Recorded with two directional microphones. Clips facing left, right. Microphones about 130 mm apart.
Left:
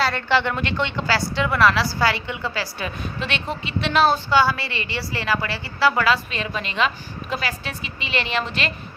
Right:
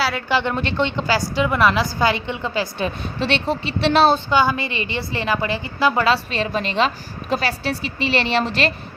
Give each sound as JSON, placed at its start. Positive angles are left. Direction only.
{"t": 0.0, "sound": "speech", "side_deg": -10}
{"t": 0.5, "sound": "a woman's voice", "side_deg": -25}